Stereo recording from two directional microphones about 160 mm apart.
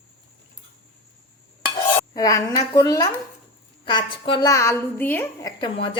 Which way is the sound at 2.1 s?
20° left (ahead or behind).